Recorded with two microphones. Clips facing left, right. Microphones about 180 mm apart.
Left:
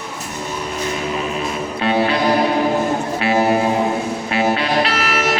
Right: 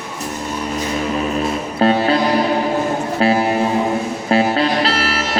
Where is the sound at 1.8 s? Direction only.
35° right (ahead or behind).